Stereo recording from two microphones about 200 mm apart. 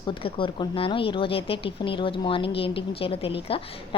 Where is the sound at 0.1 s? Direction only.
25° left (ahead or behind).